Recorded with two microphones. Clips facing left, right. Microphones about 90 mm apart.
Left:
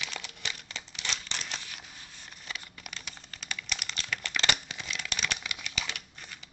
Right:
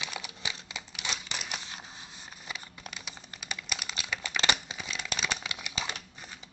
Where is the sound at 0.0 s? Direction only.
15° right (ahead or behind).